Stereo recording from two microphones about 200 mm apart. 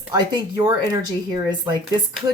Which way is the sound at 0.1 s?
20° right (ahead or behind).